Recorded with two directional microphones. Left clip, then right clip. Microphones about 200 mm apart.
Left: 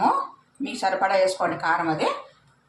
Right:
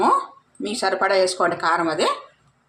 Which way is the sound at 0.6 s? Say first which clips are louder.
Right 2 dB; 55° right (ahead or behind).